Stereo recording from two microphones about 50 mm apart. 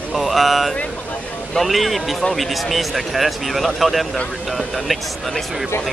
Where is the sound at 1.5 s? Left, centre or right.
Centre.